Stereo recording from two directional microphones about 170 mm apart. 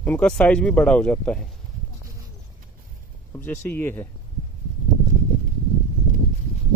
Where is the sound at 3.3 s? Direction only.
10° left (ahead or behind).